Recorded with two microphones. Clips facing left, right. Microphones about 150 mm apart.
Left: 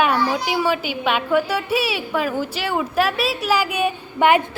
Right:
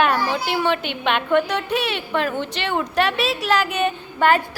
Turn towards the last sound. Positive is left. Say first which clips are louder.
# left 2 dB
turn(degrees=15)  # may be behind; listen again after turning